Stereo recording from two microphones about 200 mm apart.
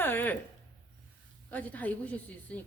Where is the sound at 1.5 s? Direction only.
10° left (ahead or behind).